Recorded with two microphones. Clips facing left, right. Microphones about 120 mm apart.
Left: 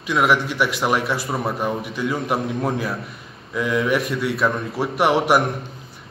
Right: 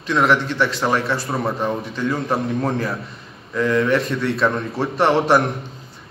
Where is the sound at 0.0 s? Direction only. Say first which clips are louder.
Right 1 dB; 10° left (ahead or behind).